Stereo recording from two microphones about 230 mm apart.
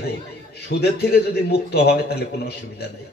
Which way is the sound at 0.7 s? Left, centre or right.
Left.